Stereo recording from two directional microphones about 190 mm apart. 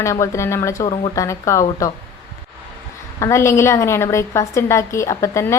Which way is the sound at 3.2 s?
15° left (ahead or behind).